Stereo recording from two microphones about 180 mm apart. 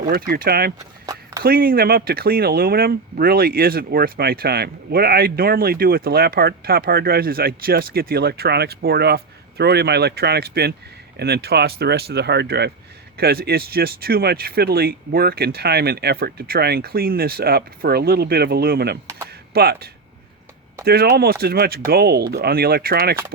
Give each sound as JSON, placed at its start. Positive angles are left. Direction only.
{"t": 0.1, "sound": "speech", "side_deg": -55}